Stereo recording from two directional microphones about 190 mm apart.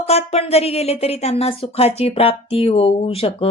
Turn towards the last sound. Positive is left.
turn(degrees=30)  # may be behind; listen again after turning